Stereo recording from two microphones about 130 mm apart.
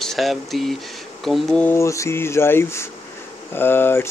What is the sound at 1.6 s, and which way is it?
Speech, 20° left (ahead or behind).